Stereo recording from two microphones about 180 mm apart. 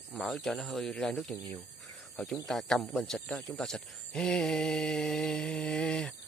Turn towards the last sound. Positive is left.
turn(degrees=5)  # may be behind; listen again after turning